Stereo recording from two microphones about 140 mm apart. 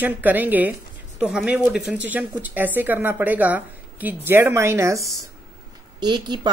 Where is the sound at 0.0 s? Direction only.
10° right (ahead or behind).